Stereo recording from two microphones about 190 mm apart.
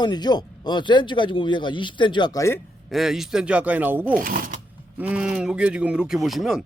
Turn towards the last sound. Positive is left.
turn(degrees=0)  # may be behind; listen again after turning